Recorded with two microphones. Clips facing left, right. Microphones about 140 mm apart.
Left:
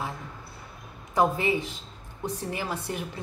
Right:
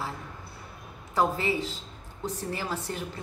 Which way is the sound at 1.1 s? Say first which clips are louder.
Left 2 dB; 15° left (ahead or behind).